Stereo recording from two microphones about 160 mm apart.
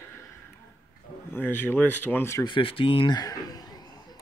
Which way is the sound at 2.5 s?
35° left (ahead or behind).